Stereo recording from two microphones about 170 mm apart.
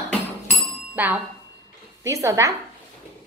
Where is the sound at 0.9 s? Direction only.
10° right (ahead or behind).